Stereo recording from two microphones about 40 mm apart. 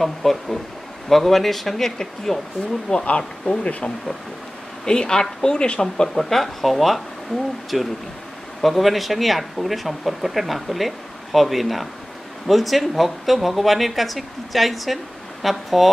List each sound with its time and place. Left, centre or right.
0.0 s speech: centre
3.1 s speech: left; by 15.9 s centre